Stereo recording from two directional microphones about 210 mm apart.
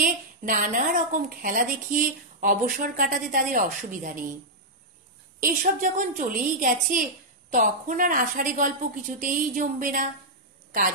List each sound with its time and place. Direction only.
0.0 s a woman's voice: 40° right (ahead or behind)
5.4 s a woman's voice: 40° right (ahead or behind)